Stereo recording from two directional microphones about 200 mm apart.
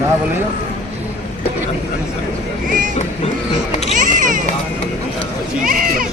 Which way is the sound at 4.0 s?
40° right (ahead or behind).